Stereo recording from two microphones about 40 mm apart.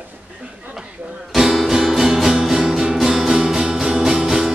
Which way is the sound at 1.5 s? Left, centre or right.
Centre.